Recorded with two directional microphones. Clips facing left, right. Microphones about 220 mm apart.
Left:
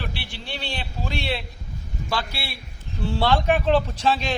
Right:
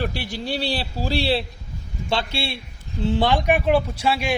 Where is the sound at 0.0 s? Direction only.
40° right (ahead or behind).